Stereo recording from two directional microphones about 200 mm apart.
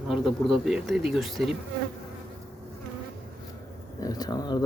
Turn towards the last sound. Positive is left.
turn(degrees=20)  # may be behind; listen again after turning